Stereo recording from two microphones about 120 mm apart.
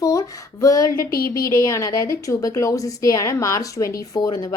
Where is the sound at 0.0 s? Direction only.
25° left (ahead or behind).